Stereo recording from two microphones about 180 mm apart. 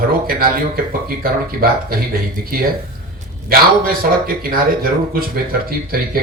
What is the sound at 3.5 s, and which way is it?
Speech, 55° right (ahead or behind).